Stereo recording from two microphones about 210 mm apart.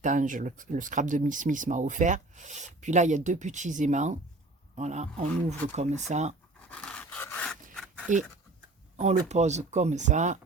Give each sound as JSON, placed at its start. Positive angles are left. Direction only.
{"t": 0.0, "sound": "speech", "side_deg": -35}
{"t": 6.7, "sound": "dog", "side_deg": 5}
{"t": 9.0, "sound": "speech", "side_deg": -30}